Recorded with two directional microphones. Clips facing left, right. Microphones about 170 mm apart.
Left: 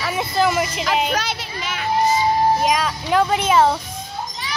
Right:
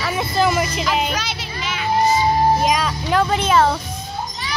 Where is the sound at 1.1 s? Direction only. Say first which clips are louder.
Left 2 dB; 50° left (ahead or behind).